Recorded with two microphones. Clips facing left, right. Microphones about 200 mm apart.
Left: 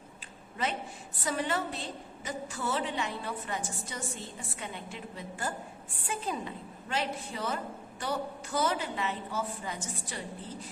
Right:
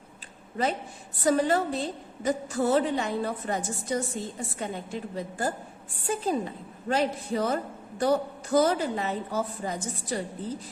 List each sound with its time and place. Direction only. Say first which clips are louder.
0.5 s a woman's voice: right 6 dB; 40° right (ahead or behind)